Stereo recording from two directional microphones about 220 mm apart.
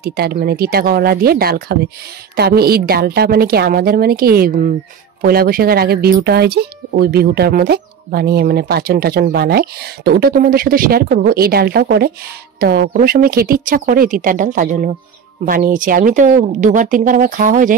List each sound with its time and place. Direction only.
0.0 s speech: 45° right (ahead or behind)